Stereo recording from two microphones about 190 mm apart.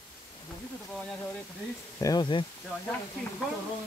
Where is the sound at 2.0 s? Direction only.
20° left (ahead or behind).